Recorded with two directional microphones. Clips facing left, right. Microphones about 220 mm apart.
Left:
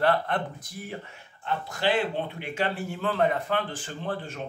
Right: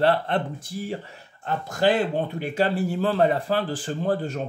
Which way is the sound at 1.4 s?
45° right (ahead or behind).